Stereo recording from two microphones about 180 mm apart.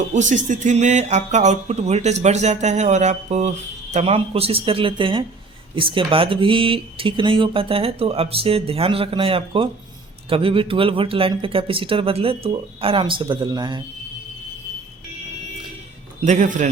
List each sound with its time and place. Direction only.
0.1 s speech: 45° right (ahead or behind); by 13.8 s 25° right (ahead or behind)
16.2 s a man's voice: 40° right (ahead or behind)